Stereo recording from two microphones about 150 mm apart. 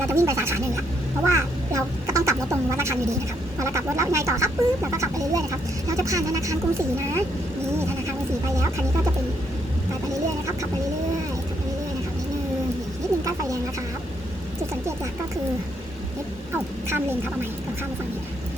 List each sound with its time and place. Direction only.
0.1 s speech: 15° right (ahead or behind)
16.9 s a woman's voice: 15° right (ahead or behind)